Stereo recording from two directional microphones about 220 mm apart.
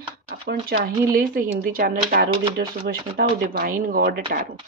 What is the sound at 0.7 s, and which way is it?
Speech, 45° right (ahead or behind).